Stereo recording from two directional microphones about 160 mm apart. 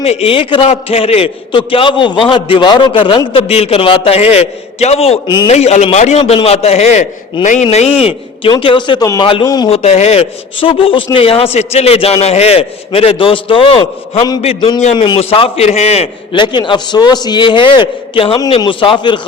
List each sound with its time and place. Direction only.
0.0 s a man's voice: 40° left (ahead or behind)
5.5 s a man's voice: 45° left (ahead or behind)
9.7 s a man's voice: 40° left (ahead or behind)
16.4 s a man's voice: 30° left (ahead or behind)